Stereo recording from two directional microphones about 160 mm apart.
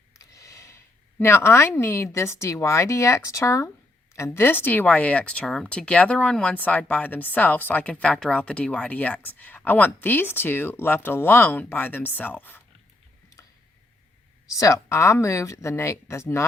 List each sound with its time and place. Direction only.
0.1 s a sound: 20° left (ahead or behind)
1.2 s speech: 15° left (ahead or behind)
14.5 s speech: 20° left (ahead or behind)